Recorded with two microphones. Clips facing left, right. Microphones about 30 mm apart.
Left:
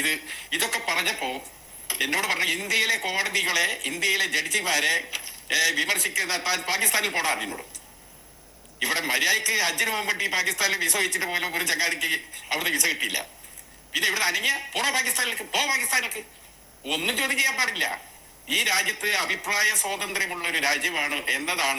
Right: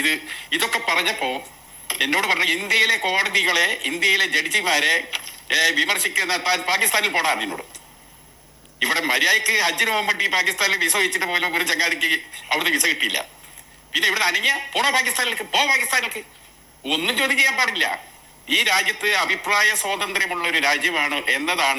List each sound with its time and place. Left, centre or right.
0.0 s speech: right
8.8 s speech: centre